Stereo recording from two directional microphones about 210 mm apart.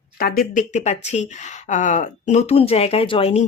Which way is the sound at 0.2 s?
45° left (ahead or behind).